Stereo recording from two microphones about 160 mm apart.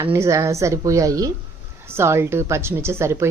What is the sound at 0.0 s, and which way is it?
A woman's voice, 15° right (ahead or behind).